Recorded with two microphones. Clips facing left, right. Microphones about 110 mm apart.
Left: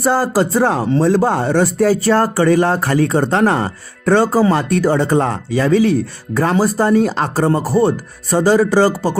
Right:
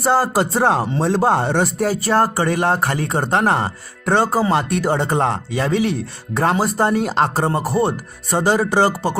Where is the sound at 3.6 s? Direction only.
25° right (ahead or behind).